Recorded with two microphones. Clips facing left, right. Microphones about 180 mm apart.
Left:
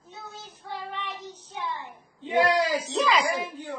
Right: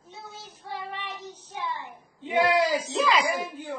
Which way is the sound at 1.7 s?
20° right (ahead or behind).